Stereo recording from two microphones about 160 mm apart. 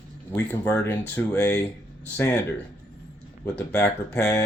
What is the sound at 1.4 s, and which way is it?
Speech, 20° left (ahead or behind).